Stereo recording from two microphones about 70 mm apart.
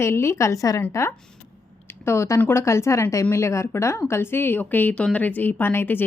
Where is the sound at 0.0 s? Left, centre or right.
Left.